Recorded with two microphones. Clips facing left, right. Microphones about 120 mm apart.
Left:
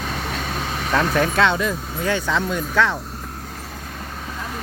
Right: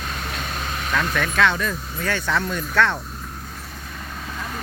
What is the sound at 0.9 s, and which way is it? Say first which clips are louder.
Speech: left 5 dB; 30° left (ahead or behind).